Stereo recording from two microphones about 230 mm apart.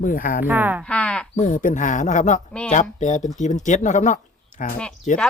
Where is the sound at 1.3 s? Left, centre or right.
Left.